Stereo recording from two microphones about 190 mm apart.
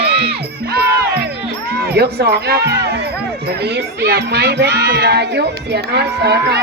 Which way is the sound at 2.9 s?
60° right (ahead or behind).